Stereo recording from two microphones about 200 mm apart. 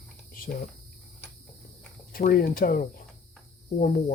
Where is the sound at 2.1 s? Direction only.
45° left (ahead or behind).